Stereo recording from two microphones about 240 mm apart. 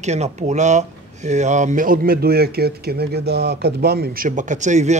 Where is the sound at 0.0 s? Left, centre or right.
Right.